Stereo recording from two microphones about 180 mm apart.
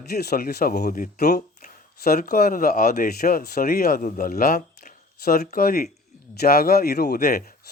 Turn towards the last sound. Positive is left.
turn(degrees=55)  # may be behind; listen again after turning